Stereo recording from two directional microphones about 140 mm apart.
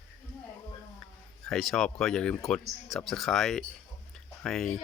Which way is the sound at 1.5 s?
Centre (ahead or behind).